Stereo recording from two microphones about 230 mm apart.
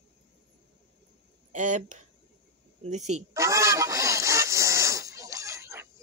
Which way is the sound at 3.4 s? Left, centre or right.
Centre.